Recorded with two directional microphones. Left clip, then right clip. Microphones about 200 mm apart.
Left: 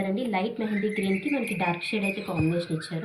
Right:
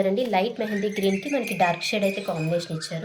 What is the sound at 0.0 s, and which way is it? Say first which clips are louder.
A woman's voice: right 6 dB; 70° right (ahead or behind).